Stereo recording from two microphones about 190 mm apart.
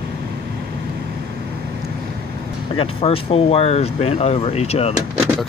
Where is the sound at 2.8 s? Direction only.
30° left (ahead or behind).